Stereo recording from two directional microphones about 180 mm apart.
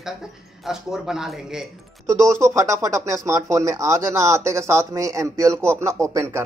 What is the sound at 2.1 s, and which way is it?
Speech, 15° right (ahead or behind).